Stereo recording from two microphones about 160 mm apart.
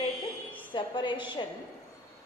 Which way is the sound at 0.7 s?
30° left (ahead or behind).